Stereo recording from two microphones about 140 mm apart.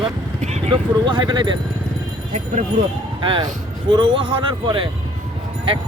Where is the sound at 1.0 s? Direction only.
35° right (ahead or behind).